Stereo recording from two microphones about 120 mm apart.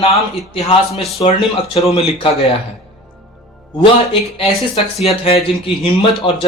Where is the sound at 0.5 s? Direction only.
50° left (ahead or behind).